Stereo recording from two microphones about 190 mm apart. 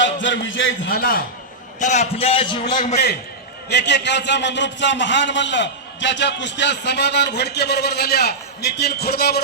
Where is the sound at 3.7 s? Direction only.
65° left (ahead or behind).